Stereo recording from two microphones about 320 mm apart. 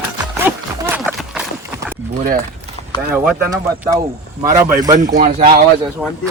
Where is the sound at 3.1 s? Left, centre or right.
Centre.